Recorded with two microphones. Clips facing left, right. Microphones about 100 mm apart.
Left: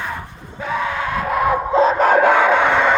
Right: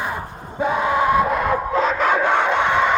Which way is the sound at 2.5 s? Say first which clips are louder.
Left 3 dB; 55° left (ahead or behind).